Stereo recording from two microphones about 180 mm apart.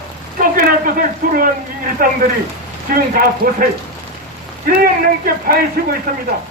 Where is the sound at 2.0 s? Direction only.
50° right (ahead or behind).